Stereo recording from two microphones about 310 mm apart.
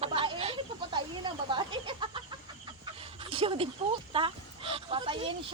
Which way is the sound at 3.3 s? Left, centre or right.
Centre.